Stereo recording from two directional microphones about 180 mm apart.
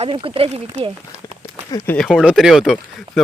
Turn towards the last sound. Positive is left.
turn(degrees=0)  # may be behind; listen again after turning